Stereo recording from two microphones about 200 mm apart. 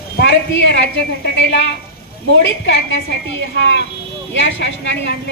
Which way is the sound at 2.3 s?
60° left (ahead or behind).